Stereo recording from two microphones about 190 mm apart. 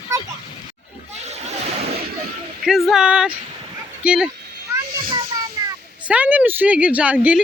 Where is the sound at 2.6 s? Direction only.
Centre (ahead or behind).